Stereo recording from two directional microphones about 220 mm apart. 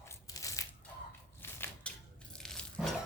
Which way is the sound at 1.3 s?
5° left (ahead or behind).